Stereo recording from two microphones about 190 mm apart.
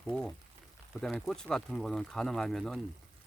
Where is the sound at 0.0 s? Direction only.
5° left (ahead or behind).